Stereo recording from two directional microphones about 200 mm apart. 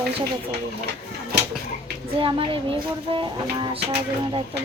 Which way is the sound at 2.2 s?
25° right (ahead or behind).